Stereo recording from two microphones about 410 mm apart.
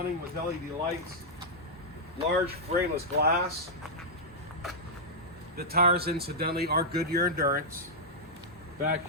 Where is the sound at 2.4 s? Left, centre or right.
Centre.